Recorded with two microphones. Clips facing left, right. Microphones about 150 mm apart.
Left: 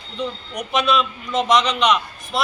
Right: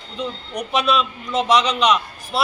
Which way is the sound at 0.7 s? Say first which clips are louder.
Even; 35° right (ahead or behind).